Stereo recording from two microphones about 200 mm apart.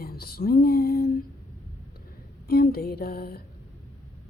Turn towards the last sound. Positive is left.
turn(degrees=50)  # may be behind; listen again after turning